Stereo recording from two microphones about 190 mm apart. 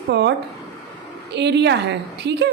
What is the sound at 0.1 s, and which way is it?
A woman's voice, 65° right (ahead or behind).